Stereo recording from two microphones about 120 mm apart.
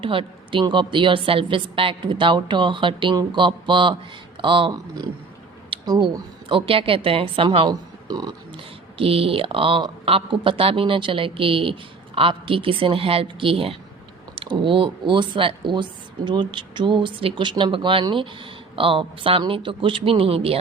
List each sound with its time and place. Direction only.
0.0 s speech: 45° right (ahead or behind)
5.8 s speech: 30° right (ahead or behind)
6.5 s speech: 50° right (ahead or behind)
7.7 s speech: 35° right (ahead or behind)
9.0 s speech: 50° right (ahead or behind)